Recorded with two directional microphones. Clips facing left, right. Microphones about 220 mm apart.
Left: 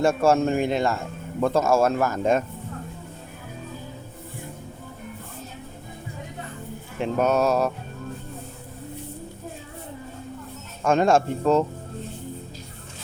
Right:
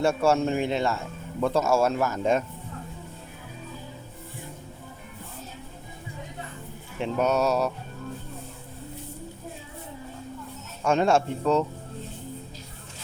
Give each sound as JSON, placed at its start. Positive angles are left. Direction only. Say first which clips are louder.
{"t": 0.0, "sound": "speech", "louder": "left 3 dB", "side_deg": 50}
{"t": 7.0, "sound": "speech", "louder": "left 2 dB", "side_deg": 50}
{"t": 10.8, "sound": "speech", "louder": "left 3 dB", "side_deg": 50}